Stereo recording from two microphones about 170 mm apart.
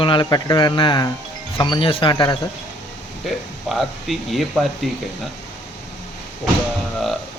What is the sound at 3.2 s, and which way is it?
Speech, centre (ahead or behind).